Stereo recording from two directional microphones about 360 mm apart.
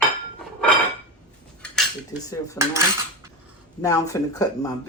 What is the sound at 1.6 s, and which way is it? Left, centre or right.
Cutlery, centre.